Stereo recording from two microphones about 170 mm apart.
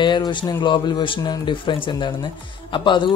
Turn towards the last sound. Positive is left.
turn(degrees=30)  # may be behind; listen again after turning